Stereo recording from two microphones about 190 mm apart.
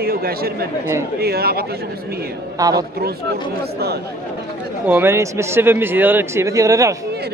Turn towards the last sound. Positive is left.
turn(degrees=-15)  # may be behind; listen again after turning